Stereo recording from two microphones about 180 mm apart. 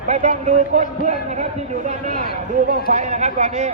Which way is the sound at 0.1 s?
40° right (ahead or behind).